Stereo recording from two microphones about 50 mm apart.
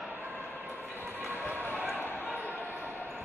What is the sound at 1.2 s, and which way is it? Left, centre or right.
Run, right.